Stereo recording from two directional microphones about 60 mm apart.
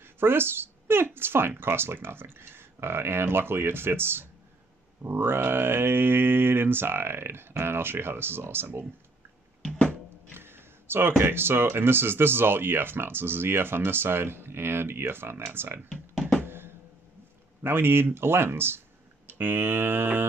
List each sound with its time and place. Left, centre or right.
0.0 s speech: right
9.6 s music: centre
10.3 s speech: right
15.9 s music: centre
16.4 s drum: right
17.6 s speech: right